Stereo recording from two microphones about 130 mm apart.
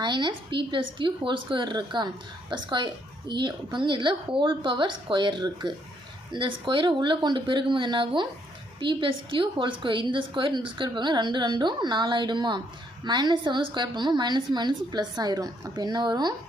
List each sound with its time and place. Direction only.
0.0 s a woman's voice: 35° right (ahead or behind)